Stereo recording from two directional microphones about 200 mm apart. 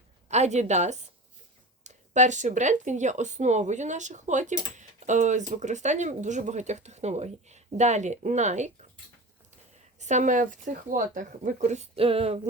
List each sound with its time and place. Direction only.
0.3 s speech: 35° right (ahead or behind)
10.0 s speech: 35° right (ahead or behind)